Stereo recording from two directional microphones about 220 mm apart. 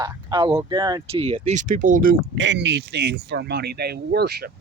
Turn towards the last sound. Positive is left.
turn(degrees=-45)  # may be behind; listen again after turning